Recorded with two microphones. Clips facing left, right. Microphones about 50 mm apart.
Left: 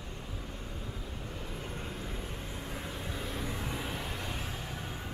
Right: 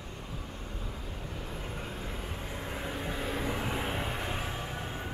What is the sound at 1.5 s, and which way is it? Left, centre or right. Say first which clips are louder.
Vehicle: right 1 dB; centre.